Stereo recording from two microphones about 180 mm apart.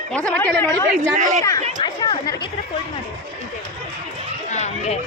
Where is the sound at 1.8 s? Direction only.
25° left (ahead or behind).